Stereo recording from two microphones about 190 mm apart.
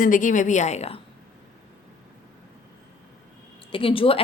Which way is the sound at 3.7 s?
30° left (ahead or behind).